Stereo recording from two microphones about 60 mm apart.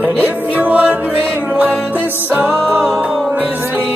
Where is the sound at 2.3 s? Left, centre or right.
Right.